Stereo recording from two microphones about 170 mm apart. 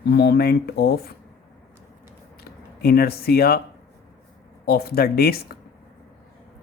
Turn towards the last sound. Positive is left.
turn(degrees=65)  # may be behind; listen again after turning